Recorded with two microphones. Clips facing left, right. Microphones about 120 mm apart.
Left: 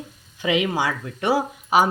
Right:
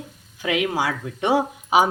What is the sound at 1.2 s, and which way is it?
Speech, 20° right (ahead or behind).